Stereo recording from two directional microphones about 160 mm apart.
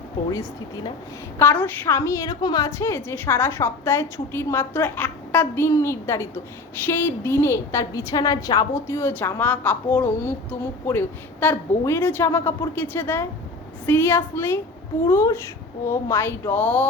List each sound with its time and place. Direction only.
1.4 s a woman's voice: 10° left (ahead or behind)